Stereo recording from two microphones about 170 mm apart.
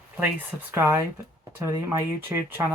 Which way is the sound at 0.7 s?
15° right (ahead or behind).